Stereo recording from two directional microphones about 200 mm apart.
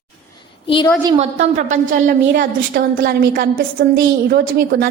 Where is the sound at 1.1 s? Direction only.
35° right (ahead or behind).